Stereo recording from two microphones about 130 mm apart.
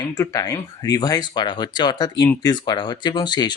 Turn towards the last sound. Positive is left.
turn(degrees=35)  # may be behind; listen again after turning